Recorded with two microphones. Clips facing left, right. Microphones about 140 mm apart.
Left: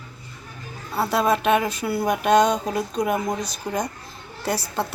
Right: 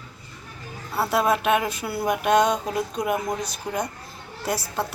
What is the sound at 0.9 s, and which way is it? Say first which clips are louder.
Speech: left 1 dB; 5° right (ahead or behind).